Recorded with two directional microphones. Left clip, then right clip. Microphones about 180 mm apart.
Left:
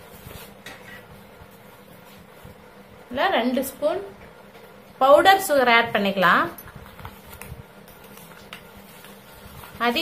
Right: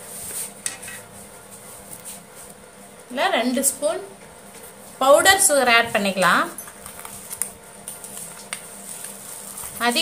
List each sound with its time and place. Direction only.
3.2 s a woman's voice: 5° left (ahead or behind)
4.9 s a woman's voice: 5° left (ahead or behind)
9.8 s a sound: centre (ahead or behind)